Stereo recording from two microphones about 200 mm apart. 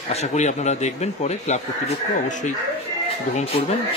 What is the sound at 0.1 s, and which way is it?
Speech, 35° left (ahead or behind).